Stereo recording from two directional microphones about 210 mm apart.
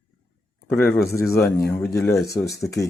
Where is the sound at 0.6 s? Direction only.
10° left (ahead or behind).